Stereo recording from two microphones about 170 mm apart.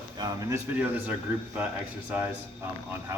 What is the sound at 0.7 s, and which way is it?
Speech, 10° right (ahead or behind).